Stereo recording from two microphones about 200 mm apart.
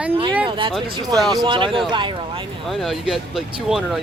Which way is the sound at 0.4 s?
25° right (ahead or behind).